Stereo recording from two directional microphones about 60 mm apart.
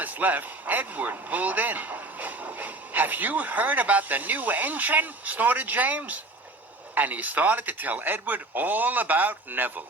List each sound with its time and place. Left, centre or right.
0.0 s speech: right